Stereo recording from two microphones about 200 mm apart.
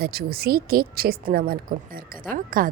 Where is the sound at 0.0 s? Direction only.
50° right (ahead or behind).